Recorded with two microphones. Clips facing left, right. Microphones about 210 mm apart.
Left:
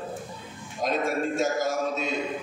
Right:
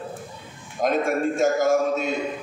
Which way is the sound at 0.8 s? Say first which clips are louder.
Right 5 dB; 55° right (ahead or behind).